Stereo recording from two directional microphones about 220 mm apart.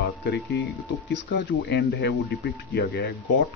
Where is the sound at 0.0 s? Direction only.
50° left (ahead or behind).